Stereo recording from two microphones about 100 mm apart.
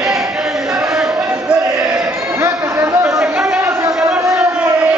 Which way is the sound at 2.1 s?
30° right (ahead or behind).